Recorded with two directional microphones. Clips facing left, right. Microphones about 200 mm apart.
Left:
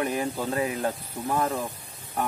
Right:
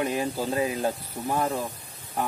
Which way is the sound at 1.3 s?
15° right (ahead or behind).